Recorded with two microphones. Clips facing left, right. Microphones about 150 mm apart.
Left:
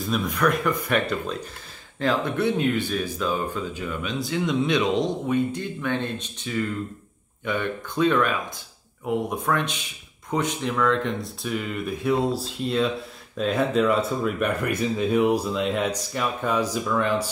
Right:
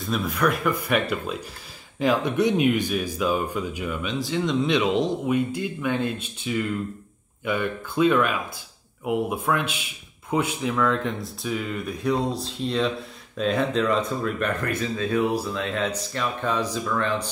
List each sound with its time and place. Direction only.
0.0 s speech: centre (ahead or behind)
4.0 s speech: centre (ahead or behind)